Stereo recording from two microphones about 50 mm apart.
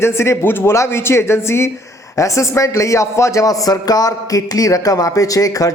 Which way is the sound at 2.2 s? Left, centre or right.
Left.